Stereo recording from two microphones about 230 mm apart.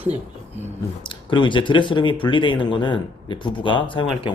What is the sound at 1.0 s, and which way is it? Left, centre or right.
Speech, left.